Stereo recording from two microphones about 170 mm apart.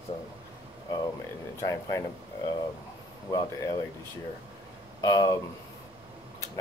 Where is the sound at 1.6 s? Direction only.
20° left (ahead or behind).